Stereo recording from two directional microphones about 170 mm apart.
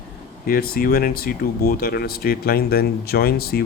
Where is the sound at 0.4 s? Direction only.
60° left (ahead or behind).